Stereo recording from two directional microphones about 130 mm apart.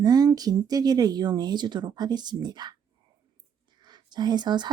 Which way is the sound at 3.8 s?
35° right (ahead or behind).